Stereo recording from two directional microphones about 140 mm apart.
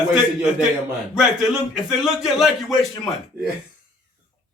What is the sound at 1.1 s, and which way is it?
Speech, centre (ahead or behind).